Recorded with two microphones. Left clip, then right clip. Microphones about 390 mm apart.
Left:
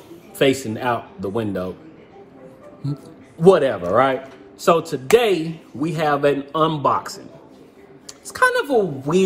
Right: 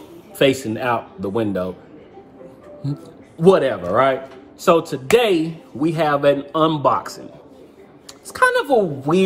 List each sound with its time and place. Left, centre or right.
0.4 s a man's voice: centre
3.3 s a man's voice: centre